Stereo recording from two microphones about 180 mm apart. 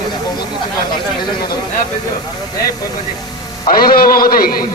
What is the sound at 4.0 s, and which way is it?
Speech, 55° left (ahead or behind).